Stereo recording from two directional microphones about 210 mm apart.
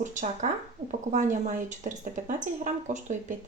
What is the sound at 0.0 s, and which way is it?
Speech, 35° right (ahead or behind).